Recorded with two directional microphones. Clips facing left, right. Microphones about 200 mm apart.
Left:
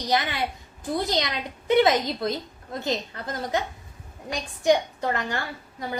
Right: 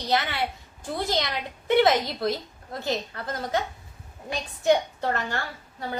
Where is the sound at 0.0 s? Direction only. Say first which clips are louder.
Left 1 dB; 15° left (ahead or behind).